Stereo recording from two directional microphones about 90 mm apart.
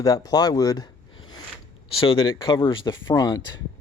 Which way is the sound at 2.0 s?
65° left (ahead or behind).